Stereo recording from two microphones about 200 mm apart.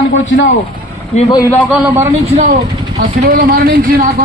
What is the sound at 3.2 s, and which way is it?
Speech, 45° right (ahead or behind).